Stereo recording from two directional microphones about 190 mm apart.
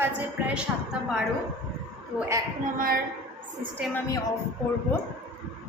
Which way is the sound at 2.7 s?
50° right (ahead or behind).